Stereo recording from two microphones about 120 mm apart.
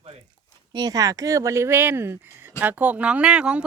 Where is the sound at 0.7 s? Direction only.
35° right (ahead or behind).